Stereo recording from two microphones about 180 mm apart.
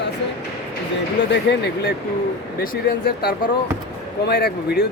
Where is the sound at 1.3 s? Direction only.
70° left (ahead or behind).